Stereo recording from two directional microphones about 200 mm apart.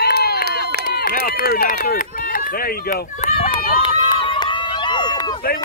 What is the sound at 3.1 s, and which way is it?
Run, 30° left (ahead or behind).